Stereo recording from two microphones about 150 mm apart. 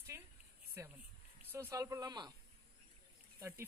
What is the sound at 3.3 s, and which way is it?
Speech, 20° right (ahead or behind).